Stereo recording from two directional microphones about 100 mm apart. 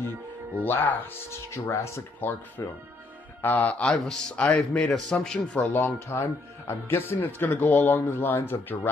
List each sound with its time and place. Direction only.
0.7 s speech: 20° left (ahead or behind)
3.4 s a man's voice: 15° left (ahead or behind)